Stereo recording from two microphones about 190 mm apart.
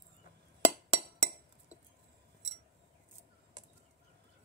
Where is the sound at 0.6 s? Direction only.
35° right (ahead or behind).